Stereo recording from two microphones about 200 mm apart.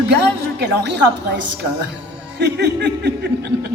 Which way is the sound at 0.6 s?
60° right (ahead or behind).